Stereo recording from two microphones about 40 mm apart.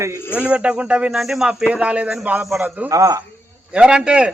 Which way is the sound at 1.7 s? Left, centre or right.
Right.